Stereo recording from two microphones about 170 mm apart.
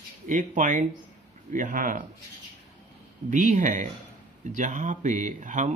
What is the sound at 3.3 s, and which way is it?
Speech, 45° right (ahead or behind).